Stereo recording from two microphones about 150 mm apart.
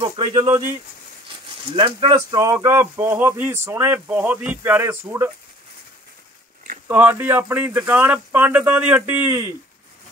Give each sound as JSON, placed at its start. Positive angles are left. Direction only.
{"t": 0.0, "sound": "speech", "side_deg": -30}
{"t": 1.7, "sound": "speech", "side_deg": -35}
{"t": 2.3, "sound": "speech", "side_deg": -20}
{"t": 6.9, "sound": "speech", "side_deg": -10}